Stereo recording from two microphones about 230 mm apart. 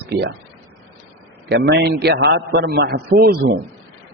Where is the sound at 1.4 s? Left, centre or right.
Right.